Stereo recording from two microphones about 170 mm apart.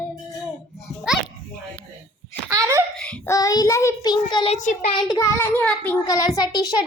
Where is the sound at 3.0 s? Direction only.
5° left (ahead or behind).